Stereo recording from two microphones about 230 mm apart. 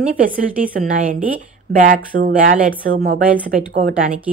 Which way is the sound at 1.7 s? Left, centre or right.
Right.